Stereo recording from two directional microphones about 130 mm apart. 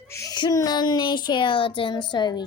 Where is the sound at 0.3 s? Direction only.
30° left (ahead or behind).